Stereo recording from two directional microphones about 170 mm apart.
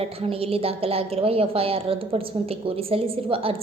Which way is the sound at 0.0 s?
35° right (ahead or behind).